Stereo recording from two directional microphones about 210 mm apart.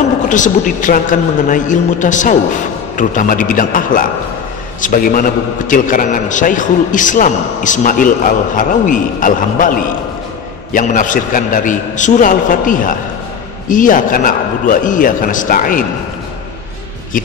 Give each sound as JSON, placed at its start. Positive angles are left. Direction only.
{"t": 0.3, "sound": "a man's voice", "side_deg": 35}
{"t": 10.7, "sound": "a man's voice", "side_deg": 35}